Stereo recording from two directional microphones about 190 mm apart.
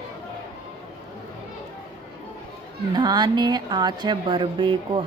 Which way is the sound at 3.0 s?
25° right (ahead or behind).